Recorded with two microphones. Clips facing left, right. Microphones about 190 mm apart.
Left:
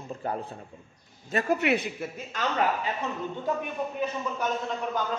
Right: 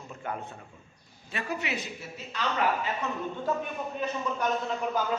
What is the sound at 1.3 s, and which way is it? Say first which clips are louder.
Speech: left 8 dB; 50° left (ahead or behind).